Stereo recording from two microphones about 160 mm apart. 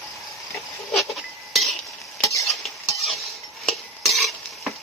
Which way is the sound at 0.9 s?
Centre (ahead or behind).